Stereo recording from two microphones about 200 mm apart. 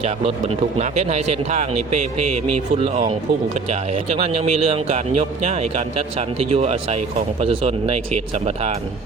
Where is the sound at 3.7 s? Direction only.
30° right (ahead or behind).